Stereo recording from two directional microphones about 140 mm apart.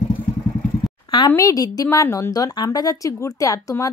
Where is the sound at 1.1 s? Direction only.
35° left (ahead or behind).